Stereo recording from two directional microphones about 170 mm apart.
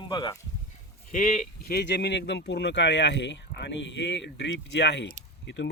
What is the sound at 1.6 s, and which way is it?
Speech, 65° left (ahead or behind).